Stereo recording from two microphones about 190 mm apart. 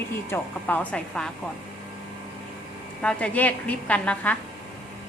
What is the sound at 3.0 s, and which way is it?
A woman's voice, 5° left (ahead or behind).